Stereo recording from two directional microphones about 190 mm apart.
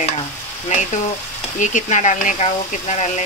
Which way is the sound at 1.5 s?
40° left (ahead or behind).